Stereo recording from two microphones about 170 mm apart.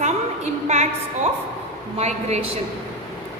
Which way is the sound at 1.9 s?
40° right (ahead or behind).